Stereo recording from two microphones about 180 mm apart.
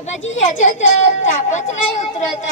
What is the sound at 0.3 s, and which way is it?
A woman's voice, 40° left (ahead or behind).